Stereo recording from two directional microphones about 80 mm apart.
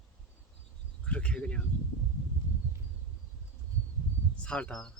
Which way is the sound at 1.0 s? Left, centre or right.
Centre.